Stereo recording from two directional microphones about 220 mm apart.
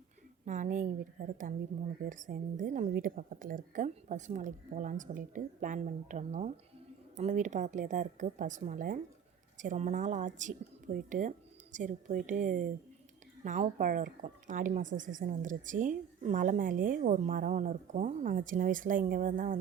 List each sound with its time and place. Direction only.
0.4 s speech: 35° right (ahead or behind)